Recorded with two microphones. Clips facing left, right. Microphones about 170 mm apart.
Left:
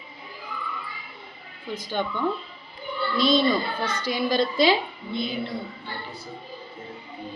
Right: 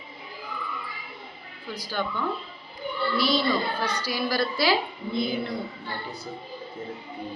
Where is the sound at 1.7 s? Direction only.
20° left (ahead or behind).